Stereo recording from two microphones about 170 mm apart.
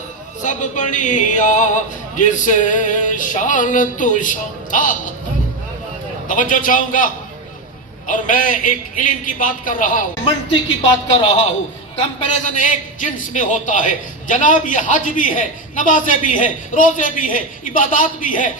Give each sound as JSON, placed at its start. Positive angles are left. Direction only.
{"t": 0.4, "sound": "a man's voice", "side_deg": 45}
{"t": 6.2, "sound": "a man's voice", "side_deg": 50}
{"t": 11.9, "sound": "a man's voice", "side_deg": 45}